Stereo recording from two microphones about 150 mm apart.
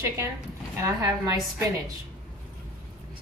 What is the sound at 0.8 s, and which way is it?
Speech, 20° right (ahead or behind).